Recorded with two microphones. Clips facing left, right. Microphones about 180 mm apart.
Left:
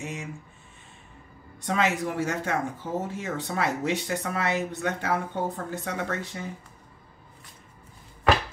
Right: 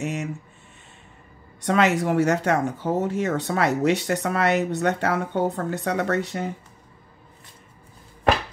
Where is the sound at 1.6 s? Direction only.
70° right (ahead or behind).